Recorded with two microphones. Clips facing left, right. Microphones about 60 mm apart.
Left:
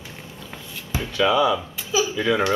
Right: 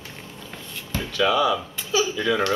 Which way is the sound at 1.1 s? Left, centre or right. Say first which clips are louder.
Left 2 dB; centre.